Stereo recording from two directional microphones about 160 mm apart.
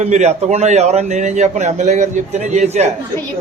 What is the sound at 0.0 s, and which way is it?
A man's voice, 45° right (ahead or behind).